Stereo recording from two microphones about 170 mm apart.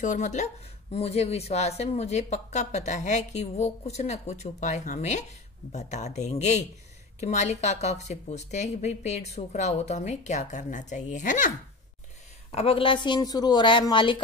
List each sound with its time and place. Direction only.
0.0 s speech: 45° left (ahead or behind)
12.4 s a woman's voice: 35° left (ahead or behind)